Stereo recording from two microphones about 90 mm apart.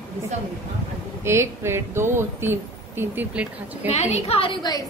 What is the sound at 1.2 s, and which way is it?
Speech, 30° right (ahead or behind).